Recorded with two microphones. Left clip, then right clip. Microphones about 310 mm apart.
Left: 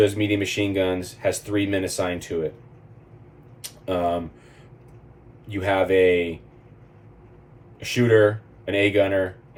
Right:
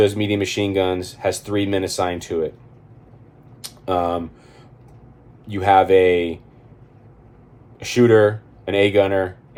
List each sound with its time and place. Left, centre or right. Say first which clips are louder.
0.0 s speech: right 2 dB; centre
3.6 s a sound: right 3 dB; centre
5.5 s speech: right 7 dB; centre
7.9 s speech: right 4 dB; centre